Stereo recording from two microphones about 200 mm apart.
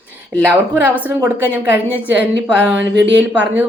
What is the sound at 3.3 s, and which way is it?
Speech, 10° right (ahead or behind).